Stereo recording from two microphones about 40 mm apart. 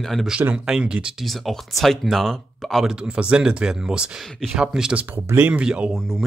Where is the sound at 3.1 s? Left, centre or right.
Right.